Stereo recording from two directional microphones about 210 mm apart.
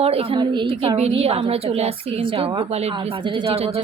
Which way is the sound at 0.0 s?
30° right (ahead or behind).